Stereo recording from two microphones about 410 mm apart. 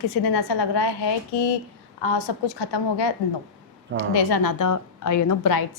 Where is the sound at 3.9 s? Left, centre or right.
Right.